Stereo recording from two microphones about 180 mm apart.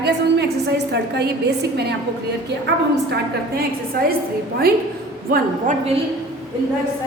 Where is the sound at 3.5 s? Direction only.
55° right (ahead or behind).